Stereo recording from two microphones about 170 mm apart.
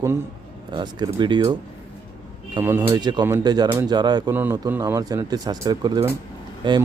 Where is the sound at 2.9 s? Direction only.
25° right (ahead or behind).